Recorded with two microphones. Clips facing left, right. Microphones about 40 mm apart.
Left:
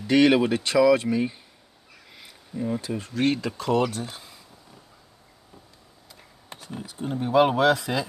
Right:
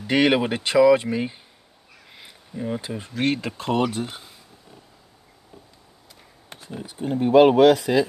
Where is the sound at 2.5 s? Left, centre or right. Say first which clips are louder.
Even; right.